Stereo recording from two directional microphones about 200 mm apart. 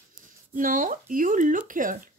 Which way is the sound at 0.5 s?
45° right (ahead or behind).